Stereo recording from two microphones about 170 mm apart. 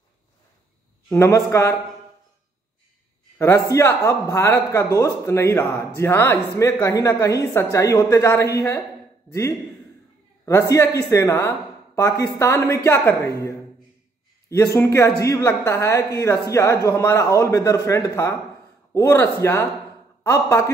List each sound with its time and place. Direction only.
1.1 s speech: 15° left (ahead or behind)
3.3 s speech: 15° left (ahead or behind)
10.7 s speech: 20° left (ahead or behind)